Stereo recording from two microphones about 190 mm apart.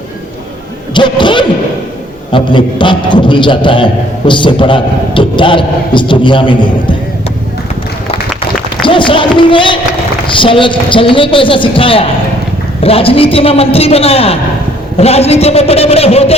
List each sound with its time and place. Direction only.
0.9 s a sound: 25° left (ahead or behind)
2.3 s a man's voice: 25° left (ahead or behind)
8.8 s a man's voice: 25° left (ahead or behind)